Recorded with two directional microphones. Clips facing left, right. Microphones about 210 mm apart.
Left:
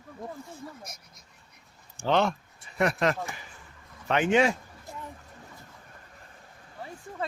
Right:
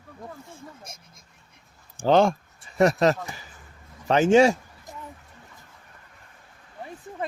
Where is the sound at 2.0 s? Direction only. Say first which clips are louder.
Right 6 dB; 40° right (ahead or behind).